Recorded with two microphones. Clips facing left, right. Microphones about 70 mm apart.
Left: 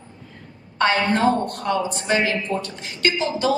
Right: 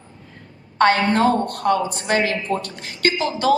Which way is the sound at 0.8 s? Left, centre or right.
Right.